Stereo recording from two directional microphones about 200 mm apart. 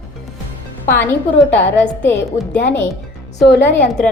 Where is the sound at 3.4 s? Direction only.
60° left (ahead or behind).